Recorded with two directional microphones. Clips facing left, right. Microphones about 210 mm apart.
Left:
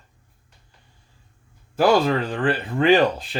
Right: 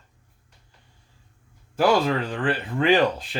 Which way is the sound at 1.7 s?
35° left (ahead or behind).